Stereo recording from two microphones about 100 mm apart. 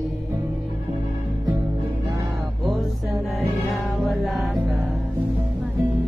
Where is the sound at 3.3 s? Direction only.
Centre (ahead or behind).